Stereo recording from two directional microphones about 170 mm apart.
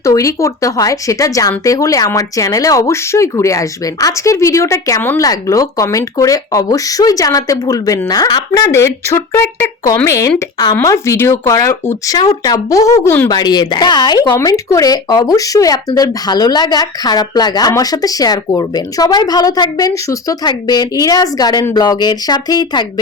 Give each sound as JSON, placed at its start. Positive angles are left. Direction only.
{"t": 0.0, "sound": "speech", "side_deg": 20}